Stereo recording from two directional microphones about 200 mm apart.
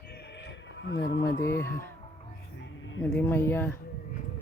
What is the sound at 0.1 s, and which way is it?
Music, 55° left (ahead or behind).